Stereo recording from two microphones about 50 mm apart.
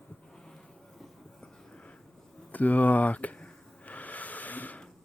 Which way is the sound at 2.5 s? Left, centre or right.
Left.